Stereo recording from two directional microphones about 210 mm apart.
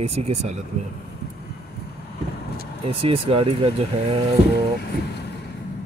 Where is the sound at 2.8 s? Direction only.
25° right (ahead or behind).